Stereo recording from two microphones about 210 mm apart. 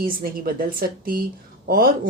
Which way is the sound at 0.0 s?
45° right (ahead or behind).